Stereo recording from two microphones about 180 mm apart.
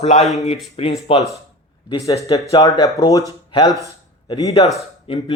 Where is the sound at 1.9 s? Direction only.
20° left (ahead or behind).